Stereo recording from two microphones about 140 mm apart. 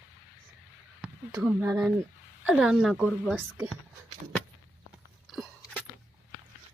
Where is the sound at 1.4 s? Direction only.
10° right (ahead or behind).